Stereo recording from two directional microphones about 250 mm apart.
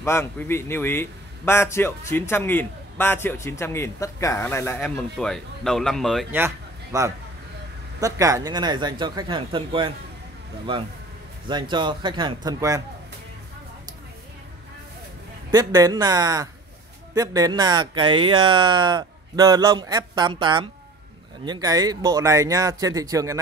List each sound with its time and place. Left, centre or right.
0.0 s a man's voice: centre; by 9.9 s right
11.4 s speech: centre
15.5 s speech: centre